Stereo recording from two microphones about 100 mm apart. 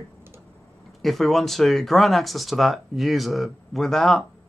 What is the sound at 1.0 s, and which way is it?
Speech, centre (ahead or behind).